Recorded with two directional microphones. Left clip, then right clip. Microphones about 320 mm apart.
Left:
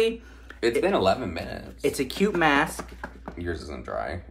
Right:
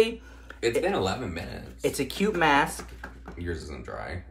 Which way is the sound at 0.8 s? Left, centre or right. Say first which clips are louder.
Left 5 dB; centre.